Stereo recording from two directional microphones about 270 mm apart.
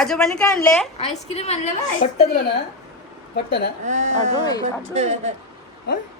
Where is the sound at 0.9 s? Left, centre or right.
Left.